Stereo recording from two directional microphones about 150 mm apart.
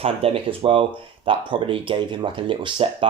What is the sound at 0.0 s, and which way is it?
Speech, 40° right (ahead or behind).